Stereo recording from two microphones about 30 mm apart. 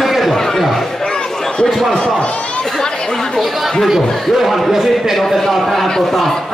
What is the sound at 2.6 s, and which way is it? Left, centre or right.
Chatter, centre.